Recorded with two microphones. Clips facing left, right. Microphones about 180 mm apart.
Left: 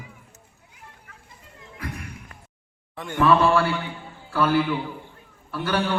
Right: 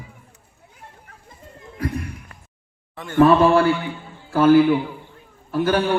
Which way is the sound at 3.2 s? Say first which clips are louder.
Right 5 dB; 45° right (ahead or behind).